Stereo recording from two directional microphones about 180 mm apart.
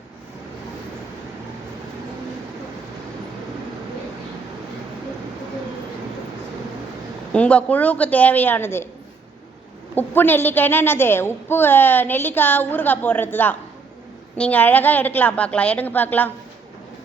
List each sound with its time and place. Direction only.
7.3 s a woman's voice: 5° left (ahead or behind)
9.9 s a woman's voice: 10° left (ahead or behind)